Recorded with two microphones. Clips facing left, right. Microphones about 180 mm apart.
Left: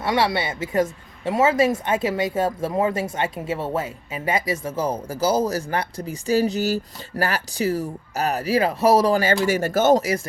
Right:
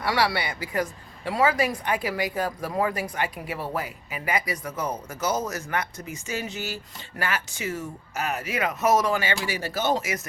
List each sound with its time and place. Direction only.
0.0 s speech: 20° left (ahead or behind)
9.3 s speech: 45° left (ahead or behind)